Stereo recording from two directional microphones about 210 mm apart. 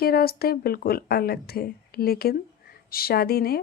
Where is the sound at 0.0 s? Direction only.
45° left (ahead or behind).